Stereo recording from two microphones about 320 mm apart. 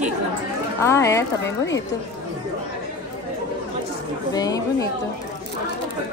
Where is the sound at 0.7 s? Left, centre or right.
Centre.